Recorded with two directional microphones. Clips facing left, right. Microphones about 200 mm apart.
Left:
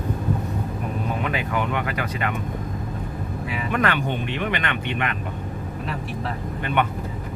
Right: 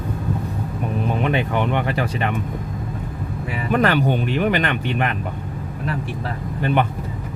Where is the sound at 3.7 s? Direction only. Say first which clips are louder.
Right 6 dB; 35° right (ahead or behind).